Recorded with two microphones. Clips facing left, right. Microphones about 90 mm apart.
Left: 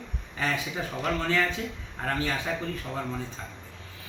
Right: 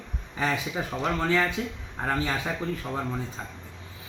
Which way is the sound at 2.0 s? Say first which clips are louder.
Right 2 dB; 20° right (ahead or behind).